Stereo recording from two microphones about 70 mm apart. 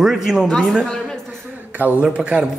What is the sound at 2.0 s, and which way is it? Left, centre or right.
Speech, centre.